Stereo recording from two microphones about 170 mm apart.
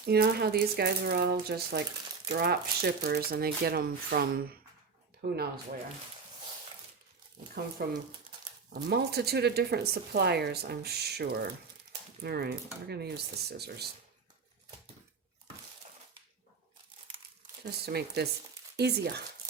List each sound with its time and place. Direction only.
0.0 s speech: 70° right (ahead or behind)
7.8 s speech: 65° right (ahead or behind)
17.6 s speech: 70° right (ahead or behind)